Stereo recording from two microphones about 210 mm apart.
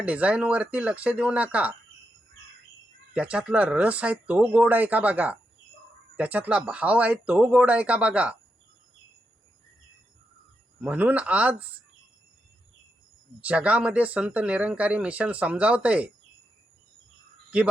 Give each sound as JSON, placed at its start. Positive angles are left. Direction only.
{"t": 0.0, "sound": "speech", "side_deg": -5}
{"t": 3.1, "sound": "speech", "side_deg": -5}
{"t": 10.8, "sound": "speech", "side_deg": -5}
{"t": 13.4, "sound": "speech", "side_deg": -5}
{"t": 17.5, "sound": "speech", "side_deg": -5}